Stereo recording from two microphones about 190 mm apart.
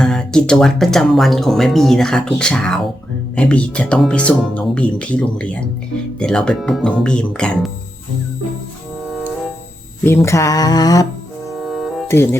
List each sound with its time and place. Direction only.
0.0 s speech: 5° left (ahead or behind)
9.0 s music: centre (ahead or behind)
10.0 s speech: 15° left (ahead or behind)
11.5 s music: centre (ahead or behind)
12.0 s speech: 15° left (ahead or behind)